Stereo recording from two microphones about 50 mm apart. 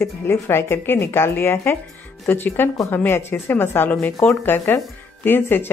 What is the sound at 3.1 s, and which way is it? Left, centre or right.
Speech, left.